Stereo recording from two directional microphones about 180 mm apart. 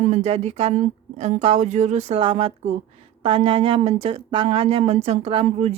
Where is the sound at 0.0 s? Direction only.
40° right (ahead or behind).